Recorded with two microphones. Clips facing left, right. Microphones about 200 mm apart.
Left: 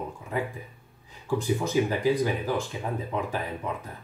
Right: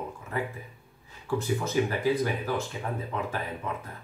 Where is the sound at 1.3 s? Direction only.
15° left (ahead or behind).